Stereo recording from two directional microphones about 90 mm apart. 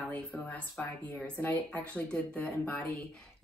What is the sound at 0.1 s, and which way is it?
Speech, 20° left (ahead or behind).